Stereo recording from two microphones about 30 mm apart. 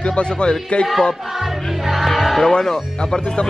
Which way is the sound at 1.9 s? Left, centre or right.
Centre.